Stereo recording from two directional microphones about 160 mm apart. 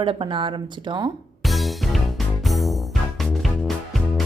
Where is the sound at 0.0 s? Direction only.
35° right (ahead or behind).